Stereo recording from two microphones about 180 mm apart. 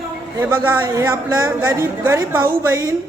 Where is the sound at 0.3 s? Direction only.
10° right (ahead or behind).